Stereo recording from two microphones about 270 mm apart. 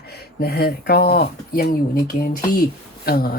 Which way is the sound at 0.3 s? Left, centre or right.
Left.